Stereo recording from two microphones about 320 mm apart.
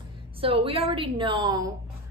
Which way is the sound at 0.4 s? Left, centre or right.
Centre.